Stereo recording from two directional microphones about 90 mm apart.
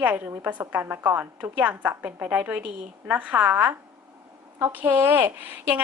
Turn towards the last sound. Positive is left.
turn(degrees=-20)  # may be behind; listen again after turning